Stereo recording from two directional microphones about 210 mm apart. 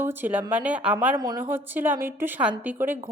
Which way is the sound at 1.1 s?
20° right (ahead or behind).